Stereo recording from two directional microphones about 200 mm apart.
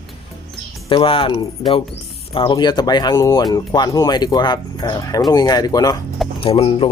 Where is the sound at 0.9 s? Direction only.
25° left (ahead or behind).